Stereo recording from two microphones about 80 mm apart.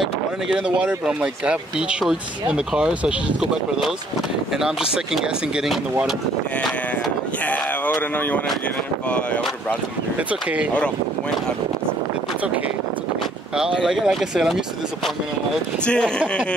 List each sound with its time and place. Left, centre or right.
0.0 s speech: centre
9.1 s speech: centre
13.8 s speech: centre
15.8 s speech: centre